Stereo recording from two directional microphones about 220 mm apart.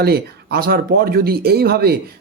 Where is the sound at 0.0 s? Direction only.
45° right (ahead or behind).